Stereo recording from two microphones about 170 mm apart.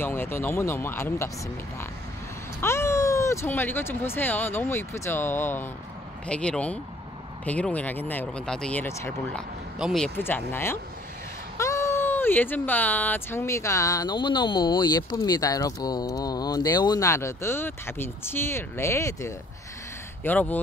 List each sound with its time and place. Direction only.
0.0 s speech: 15° left (ahead or behind)
2.6 s speech: 15° left (ahead or behind)
8.8 s speech: 15° left (ahead or behind)
9.8 s speech: centre (ahead or behind)